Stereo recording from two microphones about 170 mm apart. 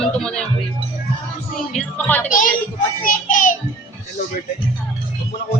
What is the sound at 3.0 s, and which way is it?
Child singing, 55° left (ahead or behind).